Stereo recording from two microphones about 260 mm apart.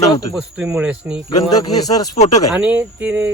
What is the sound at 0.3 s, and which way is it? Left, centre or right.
Speech, centre.